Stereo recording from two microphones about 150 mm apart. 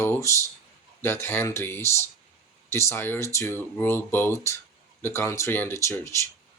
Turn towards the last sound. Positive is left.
turn(degrees=20)  # may be behind; listen again after turning